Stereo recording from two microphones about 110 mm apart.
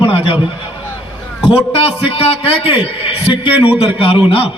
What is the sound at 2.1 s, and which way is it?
A man's voice, 60° left (ahead or behind).